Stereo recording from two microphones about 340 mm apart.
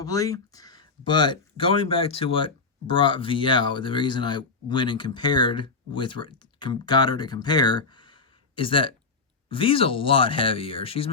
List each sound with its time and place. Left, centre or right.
0.0 s speech: centre